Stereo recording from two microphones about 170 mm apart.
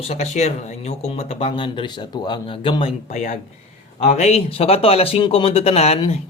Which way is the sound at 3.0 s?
45° left (ahead or behind).